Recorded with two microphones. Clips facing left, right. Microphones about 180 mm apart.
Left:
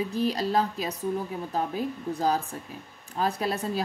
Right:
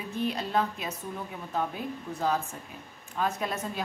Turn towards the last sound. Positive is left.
turn(degrees=35)  # may be behind; listen again after turning